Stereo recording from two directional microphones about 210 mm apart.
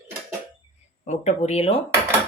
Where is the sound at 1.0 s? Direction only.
35° left (ahead or behind).